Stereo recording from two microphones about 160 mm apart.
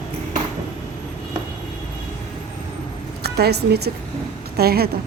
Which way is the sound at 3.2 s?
90° right.